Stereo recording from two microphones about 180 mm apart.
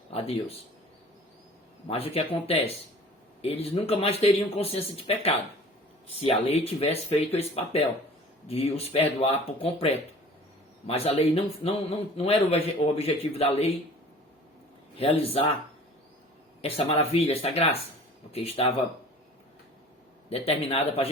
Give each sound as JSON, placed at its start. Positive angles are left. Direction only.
{"t": 0.1, "sound": "a man's voice", "side_deg": 35}
{"t": 1.9, "sound": "a man's voice", "side_deg": 30}
{"t": 14.9, "sound": "a man's voice", "side_deg": 30}
{"t": 16.6, "sound": "a man's voice", "side_deg": 35}
{"t": 20.3, "sound": "a man's voice", "side_deg": 30}